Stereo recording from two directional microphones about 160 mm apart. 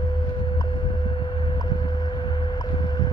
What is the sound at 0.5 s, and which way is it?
Vehicle, 30° left (ahead or behind).